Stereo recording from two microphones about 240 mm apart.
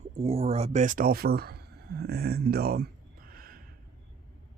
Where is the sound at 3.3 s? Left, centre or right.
Right.